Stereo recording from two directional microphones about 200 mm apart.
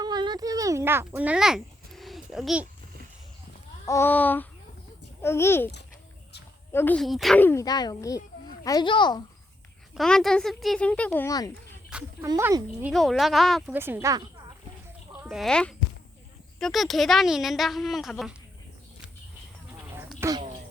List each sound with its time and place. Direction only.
0.0 s a sound: 20° right (ahead or behind); by 2.6 s 5° right (ahead or behind)
3.8 s speech: 10° left (ahead or behind)
6.7 s speech: 5° left (ahead or behind); by 9.2 s 20° left (ahead or behind)
9.9 s speech: centre (ahead or behind)
12.2 s speech: 15° right (ahead or behind)
12.9 s speech: centre (ahead or behind)
13.7 s speech: 10° right (ahead or behind)
15.2 s speech: centre (ahead or behind)
20.1 s a sound: 15° right (ahead or behind)